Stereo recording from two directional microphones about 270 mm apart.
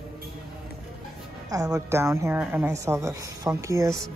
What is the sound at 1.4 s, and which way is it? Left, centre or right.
Speech, centre.